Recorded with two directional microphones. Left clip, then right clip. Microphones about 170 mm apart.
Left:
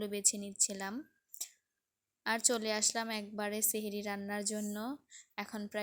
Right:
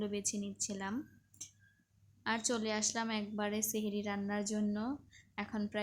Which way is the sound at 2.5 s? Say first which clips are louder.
Left 2 dB; 30° left (ahead or behind).